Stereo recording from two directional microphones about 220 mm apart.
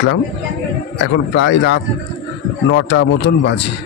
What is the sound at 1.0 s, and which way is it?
A man's voice, 55° left (ahead or behind).